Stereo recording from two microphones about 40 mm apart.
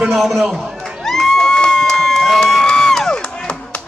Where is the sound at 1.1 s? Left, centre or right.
Centre.